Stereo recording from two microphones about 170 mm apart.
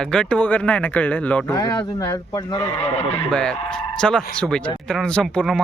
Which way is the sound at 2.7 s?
35° left (ahead or behind).